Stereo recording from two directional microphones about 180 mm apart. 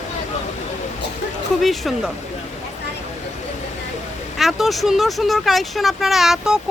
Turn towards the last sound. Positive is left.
turn(degrees=-5)  # may be behind; listen again after turning